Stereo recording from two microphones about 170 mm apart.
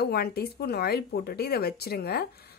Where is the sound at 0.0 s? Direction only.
65° left (ahead or behind).